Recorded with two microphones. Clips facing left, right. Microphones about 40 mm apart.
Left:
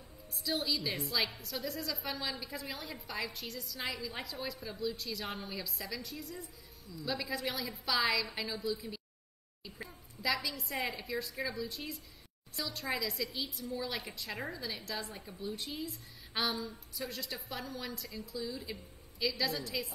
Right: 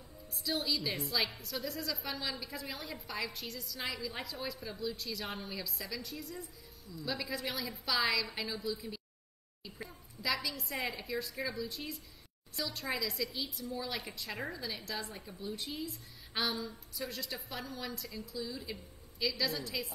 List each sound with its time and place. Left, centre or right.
0.3 s a woman's voice: centre
10.2 s a woman's voice: centre